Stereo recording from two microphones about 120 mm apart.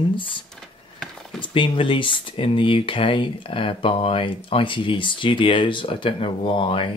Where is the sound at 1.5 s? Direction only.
45° left (ahead or behind).